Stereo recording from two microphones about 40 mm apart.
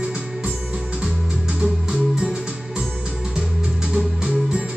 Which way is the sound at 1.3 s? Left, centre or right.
Right.